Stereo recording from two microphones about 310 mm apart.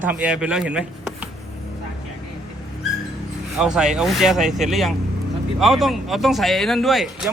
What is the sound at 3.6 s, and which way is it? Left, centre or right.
Speech, centre.